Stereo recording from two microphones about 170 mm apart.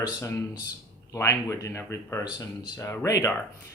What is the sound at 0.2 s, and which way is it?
Speech, 20° left (ahead or behind).